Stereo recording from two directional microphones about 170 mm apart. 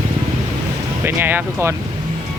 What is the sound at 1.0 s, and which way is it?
Speech, 10° right (ahead or behind).